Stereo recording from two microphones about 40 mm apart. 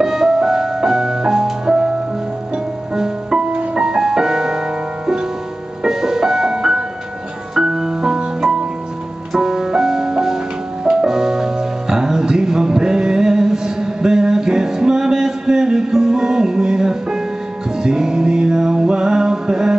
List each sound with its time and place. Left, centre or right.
0.0 s music: centre
5.9 s music: centre
7.5 s piano: centre
9.3 s music: centre